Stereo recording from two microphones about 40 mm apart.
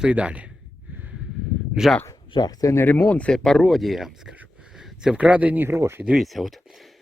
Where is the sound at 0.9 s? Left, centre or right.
Right.